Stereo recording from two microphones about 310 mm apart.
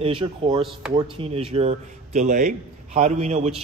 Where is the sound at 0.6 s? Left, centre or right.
Centre.